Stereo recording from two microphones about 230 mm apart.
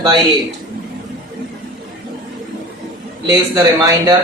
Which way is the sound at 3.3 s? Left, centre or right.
Centre.